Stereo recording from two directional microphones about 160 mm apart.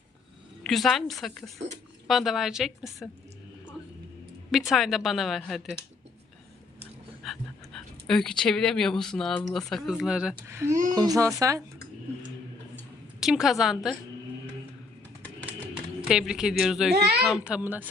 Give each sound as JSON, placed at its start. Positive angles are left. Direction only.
{"t": 0.6, "sound": "speech", "side_deg": 0}
{"t": 4.5, "sound": "speech", "side_deg": 0}
{"t": 7.3, "sound": "speech", "side_deg": 5}
{"t": 10.4, "sound": "a child's voice", "side_deg": -15}
{"t": 13.1, "sound": "speech", "side_deg": -5}
{"t": 16.0, "sound": "a child's voice", "side_deg": -5}